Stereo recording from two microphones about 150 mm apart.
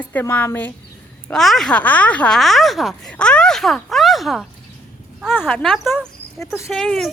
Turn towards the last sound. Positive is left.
turn(degrees=5)  # may be behind; listen again after turning